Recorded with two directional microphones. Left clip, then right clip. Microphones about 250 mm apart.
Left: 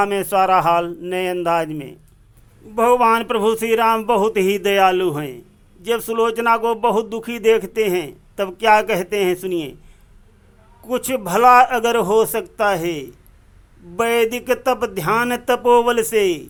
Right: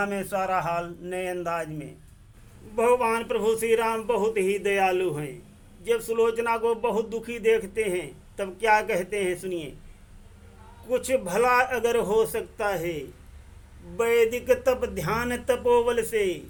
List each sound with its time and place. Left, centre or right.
0.0 s speech: left
10.8 s speech: centre